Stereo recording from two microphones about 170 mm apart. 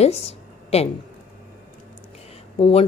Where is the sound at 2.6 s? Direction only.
35° left (ahead or behind).